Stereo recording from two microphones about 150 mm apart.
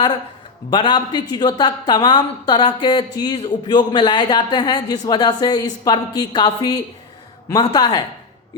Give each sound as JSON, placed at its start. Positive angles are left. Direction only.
{"t": 0.7, "sound": "a woman's voice", "side_deg": 30}